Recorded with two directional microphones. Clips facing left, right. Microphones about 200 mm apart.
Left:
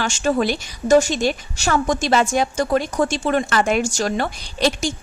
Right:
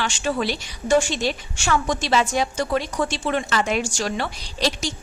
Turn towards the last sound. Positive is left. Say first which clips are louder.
# left 5 dB
turn(degrees=50)  # may be behind; listen again after turning